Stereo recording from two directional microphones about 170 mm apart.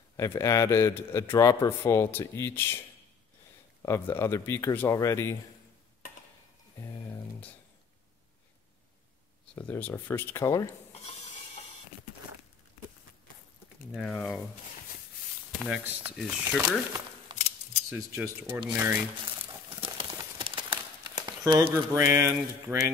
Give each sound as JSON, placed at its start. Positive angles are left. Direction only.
{"t": 0.2, "sound": "a man's voice", "side_deg": 15}
{"t": 3.8, "sound": "a man's voice", "side_deg": 15}
{"t": 9.6, "sound": "a man's voice", "side_deg": 10}
{"t": 10.9, "sound": "a sound", "side_deg": 35}
{"t": 13.9, "sound": "speech", "side_deg": 0}
{"t": 15.6, "sound": "speech", "side_deg": -10}
{"t": 17.3, "sound": "a sound", "side_deg": -25}
{"t": 18.1, "sound": "speech", "side_deg": -15}
{"t": 19.7, "sound": "crumpling", "side_deg": -30}
{"t": 21.9, "sound": "speech", "side_deg": -15}